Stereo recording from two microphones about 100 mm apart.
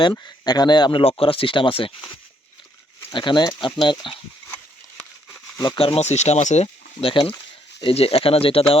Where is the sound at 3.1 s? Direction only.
55° left (ahead or behind).